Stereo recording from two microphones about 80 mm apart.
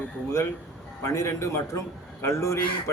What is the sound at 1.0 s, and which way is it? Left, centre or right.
A man's voice, left.